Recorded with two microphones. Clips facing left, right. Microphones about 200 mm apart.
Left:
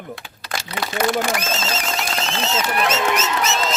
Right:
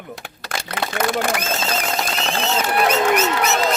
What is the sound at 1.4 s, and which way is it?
Speech, 60° right (ahead or behind).